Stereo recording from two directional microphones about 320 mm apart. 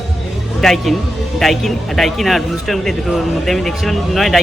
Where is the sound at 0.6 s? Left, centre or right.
Centre.